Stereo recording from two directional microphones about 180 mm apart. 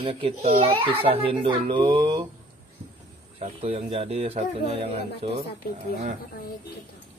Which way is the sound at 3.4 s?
35° right (ahead or behind).